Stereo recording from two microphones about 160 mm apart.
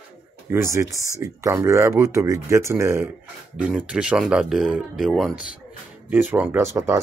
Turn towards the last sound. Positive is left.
turn(degrees=-15)  # may be behind; listen again after turning